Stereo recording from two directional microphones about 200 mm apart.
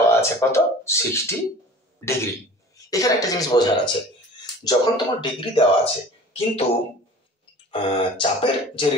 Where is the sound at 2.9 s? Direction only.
15° left (ahead or behind).